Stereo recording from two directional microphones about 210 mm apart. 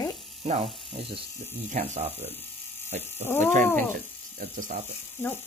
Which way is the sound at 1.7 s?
35° right (ahead or behind).